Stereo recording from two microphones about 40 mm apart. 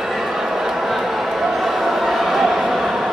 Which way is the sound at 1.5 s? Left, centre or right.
Centre.